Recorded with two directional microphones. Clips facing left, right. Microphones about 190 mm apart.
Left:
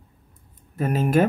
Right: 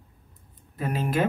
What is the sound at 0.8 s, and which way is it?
Speech, 45° left (ahead or behind).